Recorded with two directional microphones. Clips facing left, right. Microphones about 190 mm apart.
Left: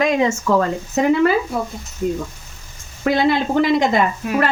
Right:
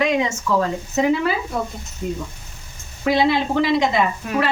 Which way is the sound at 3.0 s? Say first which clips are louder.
Left 1 dB; 55° left (ahead or behind).